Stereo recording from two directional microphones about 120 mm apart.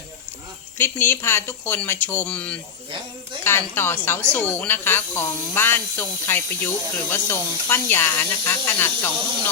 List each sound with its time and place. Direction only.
0.8 s speech: 15° left (ahead or behind)